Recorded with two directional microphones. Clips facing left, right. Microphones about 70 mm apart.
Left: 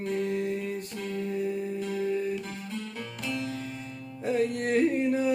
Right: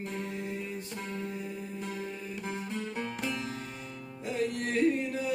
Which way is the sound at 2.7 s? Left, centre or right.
Right.